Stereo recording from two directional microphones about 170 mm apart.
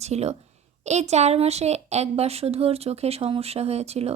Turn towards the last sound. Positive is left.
turn(degrees=-40)  # may be behind; listen again after turning